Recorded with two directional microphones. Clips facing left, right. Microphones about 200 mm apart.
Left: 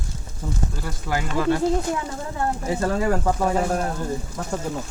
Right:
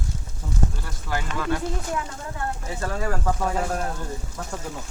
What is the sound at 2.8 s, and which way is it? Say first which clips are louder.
Speech: left 4 dB; 30° left (ahead or behind).